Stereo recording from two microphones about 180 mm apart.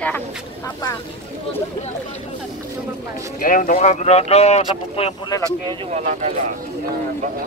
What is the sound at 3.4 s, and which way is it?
Speech, 50° left (ahead or behind).